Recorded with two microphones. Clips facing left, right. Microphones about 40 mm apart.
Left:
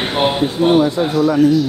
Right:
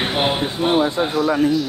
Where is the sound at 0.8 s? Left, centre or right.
Right.